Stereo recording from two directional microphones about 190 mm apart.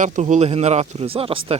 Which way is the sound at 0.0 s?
40° right (ahead or behind).